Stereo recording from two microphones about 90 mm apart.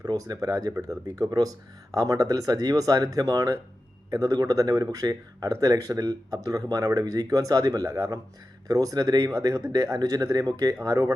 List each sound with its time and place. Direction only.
0.0 s speech: 45° right (ahead or behind)